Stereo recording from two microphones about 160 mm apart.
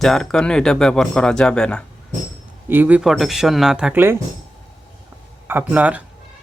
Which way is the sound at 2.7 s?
10° right (ahead or behind).